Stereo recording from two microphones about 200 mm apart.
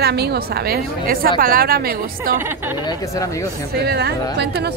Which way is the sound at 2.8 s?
15° left (ahead or behind).